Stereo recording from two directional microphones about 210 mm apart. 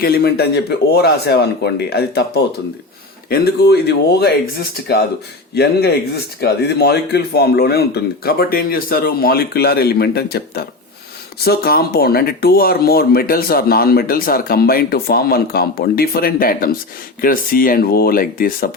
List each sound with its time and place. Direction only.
0.0 s speech: 50° left (ahead or behind)